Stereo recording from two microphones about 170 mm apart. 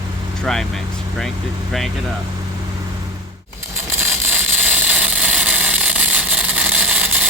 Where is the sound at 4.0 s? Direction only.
10° right (ahead or behind).